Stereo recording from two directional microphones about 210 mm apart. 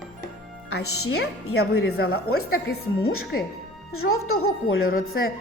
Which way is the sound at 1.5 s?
90° left.